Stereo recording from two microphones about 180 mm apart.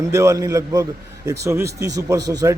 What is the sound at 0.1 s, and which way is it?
A man's voice, 15° right (ahead or behind).